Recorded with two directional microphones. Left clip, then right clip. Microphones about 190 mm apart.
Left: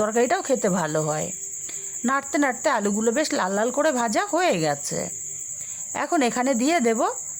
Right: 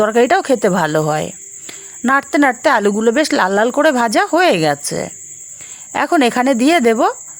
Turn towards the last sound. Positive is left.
turn(degrees=-30)  # may be behind; listen again after turning